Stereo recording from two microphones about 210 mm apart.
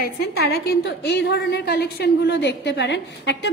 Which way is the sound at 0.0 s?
50° left (ahead or behind).